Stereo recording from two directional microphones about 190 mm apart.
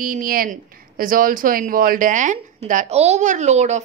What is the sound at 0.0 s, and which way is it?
Speech, 45° right (ahead or behind).